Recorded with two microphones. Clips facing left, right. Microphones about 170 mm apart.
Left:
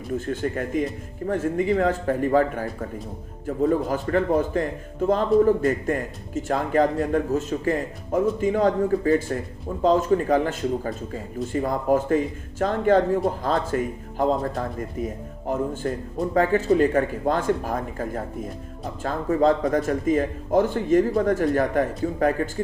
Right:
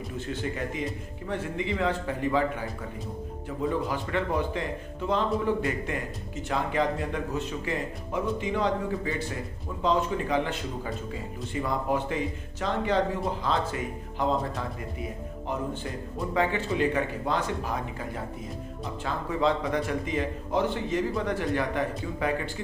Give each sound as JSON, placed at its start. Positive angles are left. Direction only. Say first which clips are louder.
{"t": 0.2, "sound": "speech", "louder": "left 5 dB", "side_deg": 50}